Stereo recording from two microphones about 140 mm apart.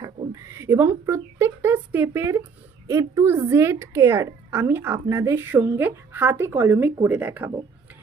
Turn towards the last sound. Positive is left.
turn(degrees=-15)  # may be behind; listen again after turning